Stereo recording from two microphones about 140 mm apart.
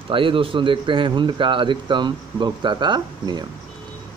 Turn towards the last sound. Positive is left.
turn(degrees=-30)  # may be behind; listen again after turning